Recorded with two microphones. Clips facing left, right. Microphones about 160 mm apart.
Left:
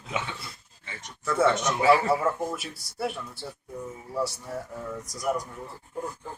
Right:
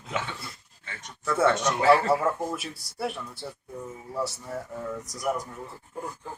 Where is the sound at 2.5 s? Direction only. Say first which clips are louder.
Right 1 dB; centre (ahead or behind).